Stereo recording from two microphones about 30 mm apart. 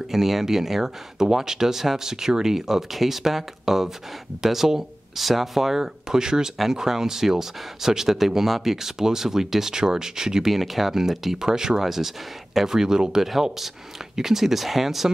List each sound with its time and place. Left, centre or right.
0.1 s speech: centre
10.5 s speech: centre; by 11.8 s right
11.8 s speech: centre
13.2 s speech: centre